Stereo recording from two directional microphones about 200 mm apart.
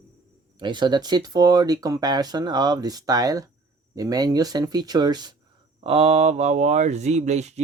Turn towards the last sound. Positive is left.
turn(degrees=-35)  # may be behind; listen again after turning